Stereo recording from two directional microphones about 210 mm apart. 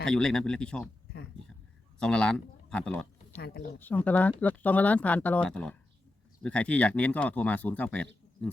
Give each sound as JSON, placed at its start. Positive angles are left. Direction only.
{"t": 0.0, "sound": "speech", "side_deg": 5}
{"t": 2.0, "sound": "speech", "side_deg": 5}
{"t": 3.4, "sound": "speech", "side_deg": 50}
{"t": 3.8, "sound": "speech", "side_deg": 10}